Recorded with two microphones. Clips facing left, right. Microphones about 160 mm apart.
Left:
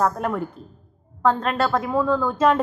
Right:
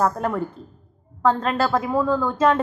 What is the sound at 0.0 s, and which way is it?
A woman's voice, centre (ahead or behind).